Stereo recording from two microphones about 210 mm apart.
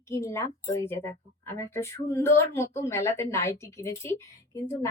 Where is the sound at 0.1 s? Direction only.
15° left (ahead or behind).